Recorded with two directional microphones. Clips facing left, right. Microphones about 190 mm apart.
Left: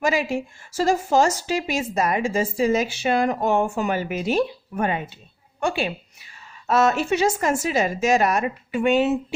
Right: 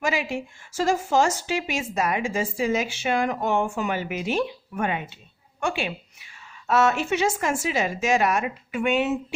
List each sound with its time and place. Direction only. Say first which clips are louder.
0.0 s a woman's voice: left 4 dB; 40° left (ahead or behind)